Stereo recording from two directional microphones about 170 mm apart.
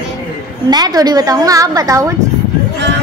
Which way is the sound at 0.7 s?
25° right (ahead or behind).